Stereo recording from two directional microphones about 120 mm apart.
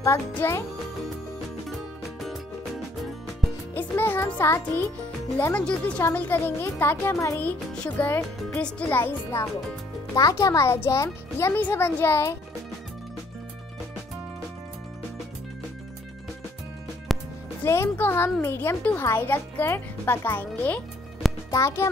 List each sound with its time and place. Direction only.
0.3 s a child's voice: 20° left (ahead or behind)
1.7 s music: centre (ahead or behind)
3.7 s music: 20° left (ahead or behind)
5.4 s a child's voice: 10° left (ahead or behind)
7.3 s a child's voice: 15° left (ahead or behind)
17.1 s music: centre (ahead or behind)
17.6 s a child's voice: 20° left (ahead or behind)